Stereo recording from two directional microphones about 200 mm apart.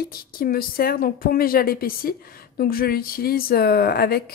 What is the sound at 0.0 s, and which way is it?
A woman's voice, 50° left (ahead or behind).